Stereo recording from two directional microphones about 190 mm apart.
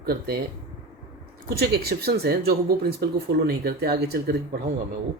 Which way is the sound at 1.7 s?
55° right (ahead or behind).